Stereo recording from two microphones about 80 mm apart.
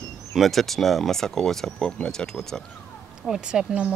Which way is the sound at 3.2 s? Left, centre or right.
Centre.